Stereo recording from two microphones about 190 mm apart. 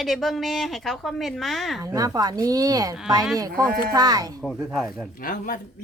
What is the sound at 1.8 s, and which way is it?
A woman's voice, 15° right (ahead or behind).